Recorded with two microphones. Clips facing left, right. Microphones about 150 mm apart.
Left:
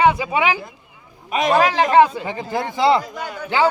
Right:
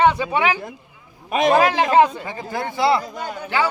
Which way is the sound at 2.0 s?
10° left (ahead or behind).